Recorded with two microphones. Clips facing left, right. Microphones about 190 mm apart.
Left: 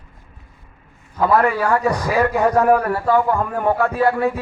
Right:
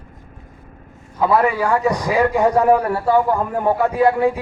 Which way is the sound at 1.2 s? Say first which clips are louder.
Even; 15° right (ahead or behind).